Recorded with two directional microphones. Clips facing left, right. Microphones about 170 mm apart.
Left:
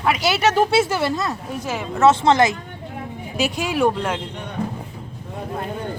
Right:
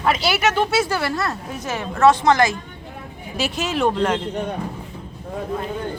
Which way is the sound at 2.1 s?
25° left (ahead or behind).